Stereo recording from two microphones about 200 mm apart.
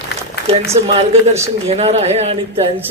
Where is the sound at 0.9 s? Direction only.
30° right (ahead or behind).